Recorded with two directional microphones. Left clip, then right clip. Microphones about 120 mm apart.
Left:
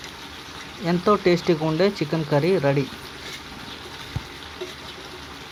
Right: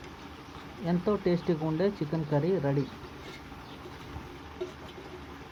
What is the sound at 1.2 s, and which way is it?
Speech, 40° left (ahead or behind).